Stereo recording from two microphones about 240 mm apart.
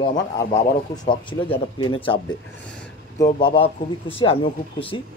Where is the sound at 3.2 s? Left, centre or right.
Centre.